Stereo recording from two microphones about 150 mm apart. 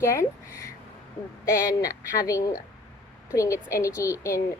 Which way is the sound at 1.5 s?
20° left (ahead or behind).